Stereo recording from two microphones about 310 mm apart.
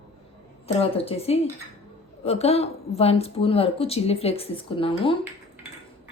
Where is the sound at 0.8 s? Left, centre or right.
Centre.